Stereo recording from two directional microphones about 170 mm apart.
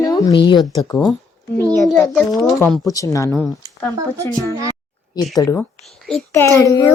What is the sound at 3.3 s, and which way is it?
Speech, 5° left (ahead or behind).